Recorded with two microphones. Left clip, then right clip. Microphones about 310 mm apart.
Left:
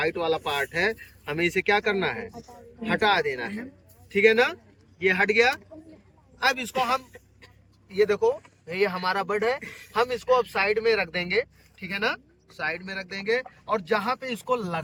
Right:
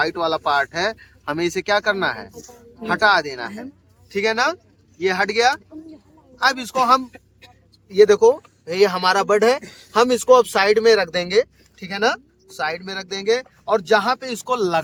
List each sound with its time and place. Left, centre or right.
0.0 s speech: centre